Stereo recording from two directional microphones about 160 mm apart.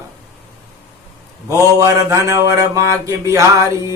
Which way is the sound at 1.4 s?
20° right (ahead or behind).